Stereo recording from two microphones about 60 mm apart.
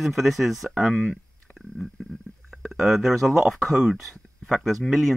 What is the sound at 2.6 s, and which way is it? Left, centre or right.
Speech, centre.